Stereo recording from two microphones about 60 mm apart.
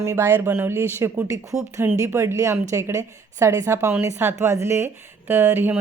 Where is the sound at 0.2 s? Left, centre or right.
Right.